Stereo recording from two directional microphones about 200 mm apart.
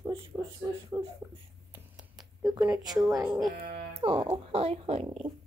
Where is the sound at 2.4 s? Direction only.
15° right (ahead or behind).